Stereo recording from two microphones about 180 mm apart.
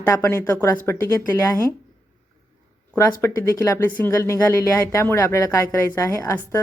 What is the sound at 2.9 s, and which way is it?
Speech, 10° left (ahead or behind).